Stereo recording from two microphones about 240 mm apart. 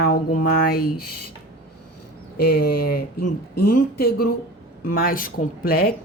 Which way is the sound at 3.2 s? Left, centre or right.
Left.